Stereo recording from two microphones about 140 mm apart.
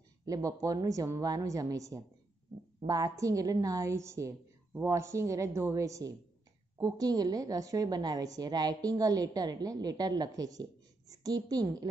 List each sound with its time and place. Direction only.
0.2 s a woman's voice: 25° right (ahead or behind)